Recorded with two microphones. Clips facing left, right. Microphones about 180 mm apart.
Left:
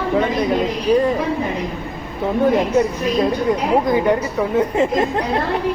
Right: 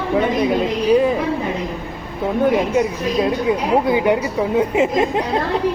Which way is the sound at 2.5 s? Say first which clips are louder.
Left 1 dB; centre (ahead or behind).